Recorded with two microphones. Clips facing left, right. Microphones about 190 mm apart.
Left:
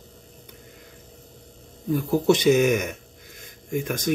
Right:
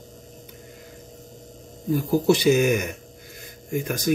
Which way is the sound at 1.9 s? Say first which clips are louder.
Even; 5° right (ahead or behind).